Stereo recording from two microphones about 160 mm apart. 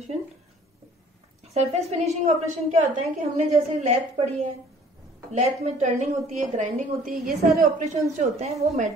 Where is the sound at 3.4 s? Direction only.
45° right (ahead or behind).